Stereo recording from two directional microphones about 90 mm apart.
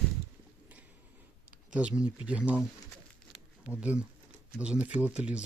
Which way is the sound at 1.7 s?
15° right (ahead or behind).